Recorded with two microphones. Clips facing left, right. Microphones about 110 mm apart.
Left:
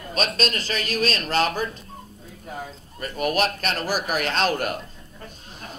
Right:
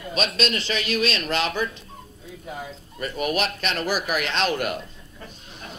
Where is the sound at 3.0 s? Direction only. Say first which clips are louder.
Left 2 dB; 40° left (ahead or behind).